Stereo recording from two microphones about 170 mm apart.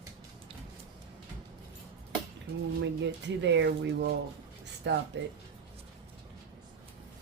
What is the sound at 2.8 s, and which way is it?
Speech, 90° right.